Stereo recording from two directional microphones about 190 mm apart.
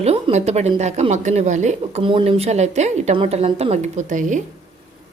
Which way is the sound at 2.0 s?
25° right (ahead or behind).